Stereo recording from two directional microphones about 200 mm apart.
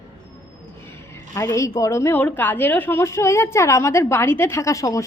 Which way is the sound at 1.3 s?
15° left (ahead or behind).